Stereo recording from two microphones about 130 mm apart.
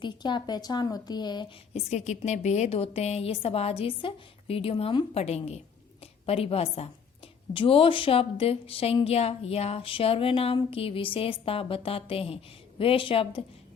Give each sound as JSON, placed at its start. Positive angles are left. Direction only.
{"t": 0.0, "sound": "a woman's voice", "side_deg": 35}
{"t": 1.7, "sound": "a woman's voice", "side_deg": 60}